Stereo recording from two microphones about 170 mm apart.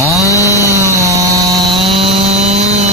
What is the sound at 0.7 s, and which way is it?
Sawing, 20° right (ahead or behind).